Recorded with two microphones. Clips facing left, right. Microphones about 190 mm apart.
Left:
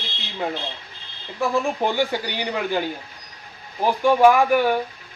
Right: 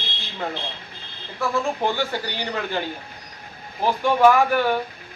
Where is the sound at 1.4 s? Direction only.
15° left (ahead or behind).